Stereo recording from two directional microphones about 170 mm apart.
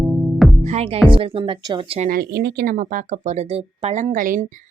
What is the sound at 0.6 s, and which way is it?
Music, 40° right (ahead or behind).